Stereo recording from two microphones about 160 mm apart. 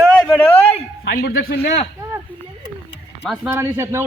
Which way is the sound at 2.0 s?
20° right (ahead or behind).